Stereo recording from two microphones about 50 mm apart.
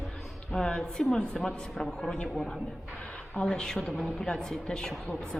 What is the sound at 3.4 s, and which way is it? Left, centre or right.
A woman's voice, centre.